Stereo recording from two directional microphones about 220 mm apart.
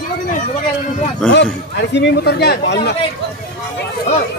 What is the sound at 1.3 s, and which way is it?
A man's voice, 50° left (ahead or behind).